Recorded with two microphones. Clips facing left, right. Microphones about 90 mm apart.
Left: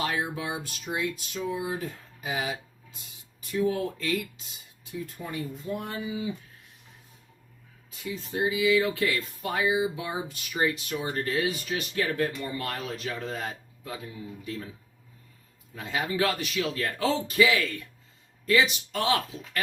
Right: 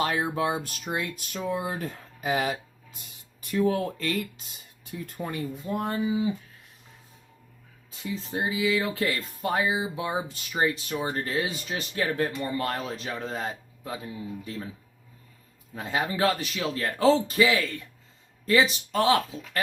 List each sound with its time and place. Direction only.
0.0 s speech: 40° right (ahead or behind)
3.7 s speech: 50° right (ahead or behind)
5.8 s speech: 35° right (ahead or behind)
7.9 s speech: 30° right (ahead or behind)
15.7 s speech: 35° right (ahead or behind)